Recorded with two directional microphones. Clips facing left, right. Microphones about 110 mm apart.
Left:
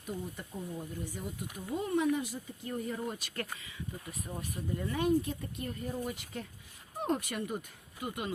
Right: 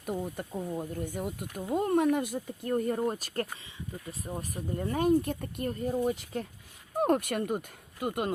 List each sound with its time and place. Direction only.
0.0 s speech: 50° right (ahead or behind)
4.0 s speech: 30° right (ahead or behind); by 5.7 s 50° right (ahead or behind)
5.8 s speech: 40° right (ahead or behind)
7.0 s speech: 50° right (ahead or behind)